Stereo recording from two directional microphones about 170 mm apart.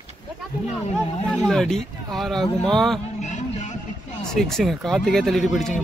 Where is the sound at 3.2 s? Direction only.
45° left (ahead or behind).